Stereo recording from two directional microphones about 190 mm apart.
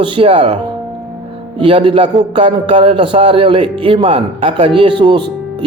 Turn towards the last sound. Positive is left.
turn(degrees=-25)  # may be behind; listen again after turning